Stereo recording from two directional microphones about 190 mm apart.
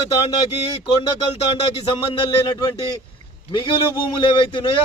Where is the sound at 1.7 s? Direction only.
25° left (ahead or behind).